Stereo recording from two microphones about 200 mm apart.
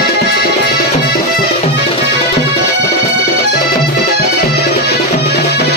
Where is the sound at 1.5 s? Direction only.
30° left (ahead or behind).